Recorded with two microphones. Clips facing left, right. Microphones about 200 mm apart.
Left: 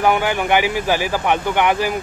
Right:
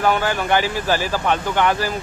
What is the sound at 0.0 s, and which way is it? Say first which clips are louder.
Speech: left 2 dB; 15° left (ahead or behind).